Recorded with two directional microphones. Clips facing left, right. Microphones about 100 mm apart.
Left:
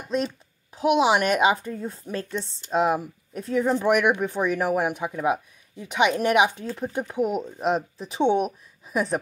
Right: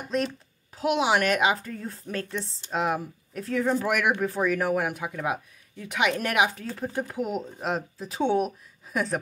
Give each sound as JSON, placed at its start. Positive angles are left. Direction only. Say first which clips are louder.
{"t": 0.7, "sound": "a woman's voice", "louder": "left 4 dB", "side_deg": 25}
{"t": 8.5, "sound": "a woman's voice", "louder": "left 2 dB", "side_deg": 15}